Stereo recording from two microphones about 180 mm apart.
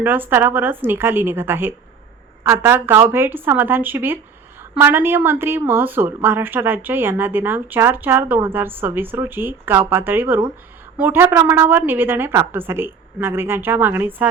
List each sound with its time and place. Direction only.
0.0 s speech: 10° right (ahead or behind)